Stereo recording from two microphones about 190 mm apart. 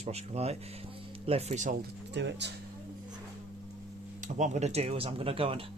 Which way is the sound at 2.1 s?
65° right (ahead or behind).